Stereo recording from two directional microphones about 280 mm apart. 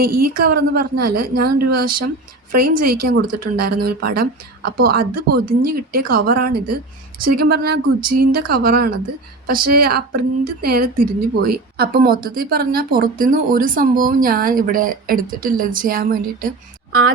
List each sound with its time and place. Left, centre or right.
0.0 s speech: right